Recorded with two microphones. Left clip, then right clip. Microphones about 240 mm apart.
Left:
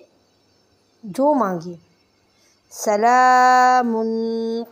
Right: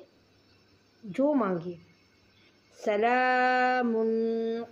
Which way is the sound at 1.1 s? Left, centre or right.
Centre.